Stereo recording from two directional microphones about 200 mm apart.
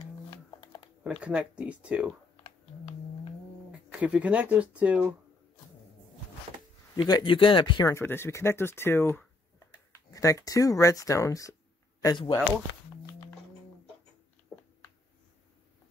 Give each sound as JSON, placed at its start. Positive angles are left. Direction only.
{"t": 1.2, "sound": "speech", "side_deg": -5}
{"t": 4.0, "sound": "speech", "side_deg": -5}
{"t": 7.0, "sound": "speech", "side_deg": 25}
{"t": 14.5, "sound": "a sound", "side_deg": 0}